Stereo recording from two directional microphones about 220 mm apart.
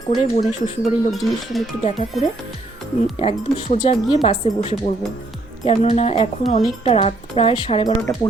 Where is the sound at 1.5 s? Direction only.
Centre (ahead or behind).